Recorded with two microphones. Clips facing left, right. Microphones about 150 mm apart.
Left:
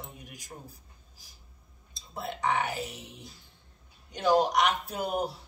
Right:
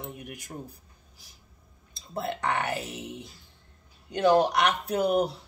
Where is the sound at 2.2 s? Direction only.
65° right (ahead or behind).